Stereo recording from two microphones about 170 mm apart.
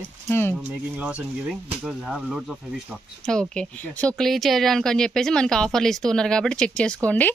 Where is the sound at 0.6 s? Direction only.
5° right (ahead or behind).